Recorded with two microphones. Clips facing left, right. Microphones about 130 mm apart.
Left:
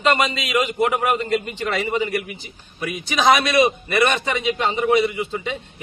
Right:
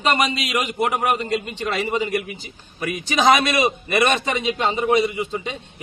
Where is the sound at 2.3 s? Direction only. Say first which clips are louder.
Even; 40° right (ahead or behind).